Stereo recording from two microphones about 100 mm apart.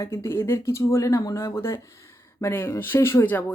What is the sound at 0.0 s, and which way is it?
Speech, 30° left (ahead or behind).